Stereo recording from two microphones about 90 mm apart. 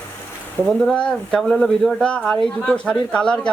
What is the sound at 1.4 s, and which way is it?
A man's voice, centre (ahead or behind).